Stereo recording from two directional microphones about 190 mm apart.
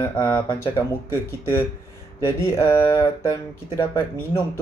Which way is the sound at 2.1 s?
15° left (ahead or behind).